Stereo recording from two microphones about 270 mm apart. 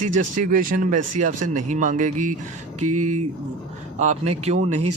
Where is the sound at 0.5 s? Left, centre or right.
Right.